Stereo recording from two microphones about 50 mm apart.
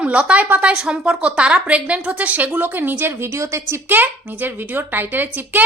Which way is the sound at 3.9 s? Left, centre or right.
Right.